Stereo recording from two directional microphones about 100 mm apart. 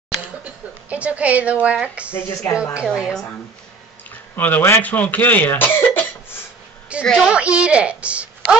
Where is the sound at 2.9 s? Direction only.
Centre (ahead or behind).